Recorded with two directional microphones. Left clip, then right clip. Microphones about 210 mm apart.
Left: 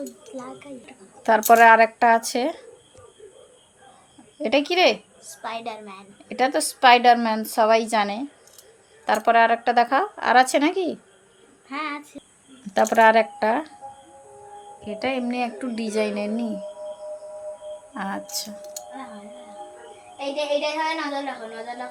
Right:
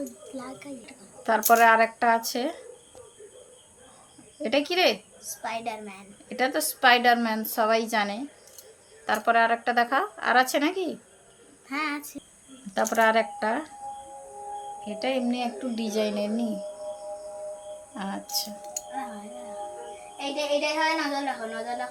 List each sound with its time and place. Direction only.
0.3 s a woman's voice: 15° left (ahead or behind)
1.5 s speech: 35° left (ahead or behind)
4.4 s a woman's voice: 25° left (ahead or behind)
5.2 s a woman's voice: 15° left (ahead or behind)
6.2 s a woman's voice: 30° left (ahead or behind)
11.7 s speech: 5° left (ahead or behind)
12.7 s speech: 35° left (ahead or behind)
14.8 s a woman's voice: 30° left (ahead or behind)
17.9 s speech: 25° left (ahead or behind)
20.3 s speech: 5° left (ahead or behind)